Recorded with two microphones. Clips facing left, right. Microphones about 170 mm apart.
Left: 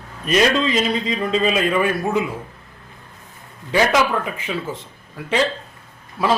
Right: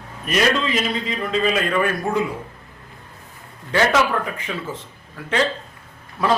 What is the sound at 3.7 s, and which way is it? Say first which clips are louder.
Speech: left 1 dB; 10° left (ahead or behind).